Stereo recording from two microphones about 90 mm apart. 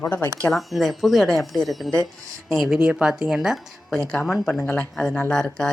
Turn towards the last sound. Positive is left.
turn(degrees=10)  # may be behind; listen again after turning